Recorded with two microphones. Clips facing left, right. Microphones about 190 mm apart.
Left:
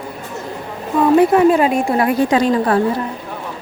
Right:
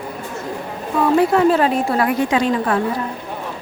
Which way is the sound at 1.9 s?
25° left (ahead or behind).